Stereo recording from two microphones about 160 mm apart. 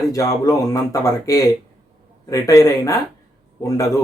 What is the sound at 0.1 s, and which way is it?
Speech, 20° left (ahead or behind).